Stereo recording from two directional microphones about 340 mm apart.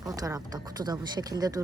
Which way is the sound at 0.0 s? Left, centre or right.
Centre.